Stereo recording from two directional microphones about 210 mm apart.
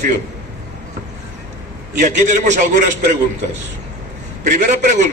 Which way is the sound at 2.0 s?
35° right (ahead or behind).